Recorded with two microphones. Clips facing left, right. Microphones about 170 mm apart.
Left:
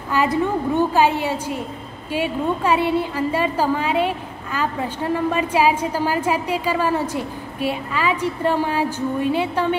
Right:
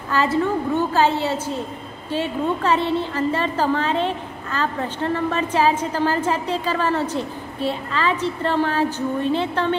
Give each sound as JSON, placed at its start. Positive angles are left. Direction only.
{"t": 0.1, "sound": "a woman's voice", "side_deg": 15}